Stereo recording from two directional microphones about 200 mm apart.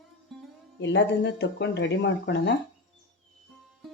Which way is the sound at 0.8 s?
60° left (ahead or behind).